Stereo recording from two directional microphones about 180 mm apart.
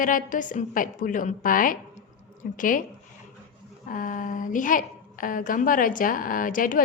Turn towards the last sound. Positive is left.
turn(degrees=50)  # may be behind; listen again after turning